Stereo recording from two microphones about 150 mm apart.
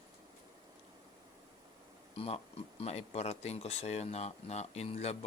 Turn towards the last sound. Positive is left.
turn(degrees=45)  # may be behind; listen again after turning